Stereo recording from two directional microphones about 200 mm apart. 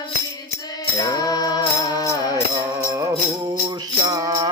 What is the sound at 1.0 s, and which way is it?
Music, 20° left (ahead or behind).